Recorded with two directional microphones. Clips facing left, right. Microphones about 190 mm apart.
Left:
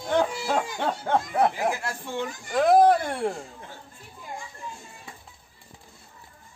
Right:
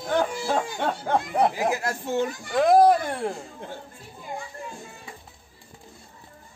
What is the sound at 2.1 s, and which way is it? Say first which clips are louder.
Speech: right 6 dB; 45° right (ahead or behind).